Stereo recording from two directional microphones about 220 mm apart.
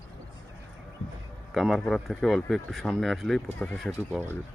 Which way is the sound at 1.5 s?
Centre (ahead or behind).